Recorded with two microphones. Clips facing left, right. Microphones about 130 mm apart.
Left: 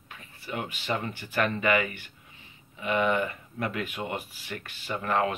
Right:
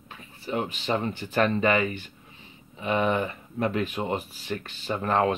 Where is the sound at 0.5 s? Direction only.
25° right (ahead or behind).